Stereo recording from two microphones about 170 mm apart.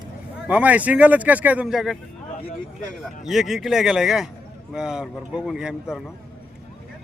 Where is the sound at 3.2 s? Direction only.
Centre (ahead or behind).